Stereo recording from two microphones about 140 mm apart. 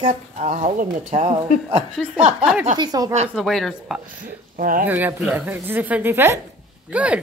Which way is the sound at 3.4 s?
Centre (ahead or behind).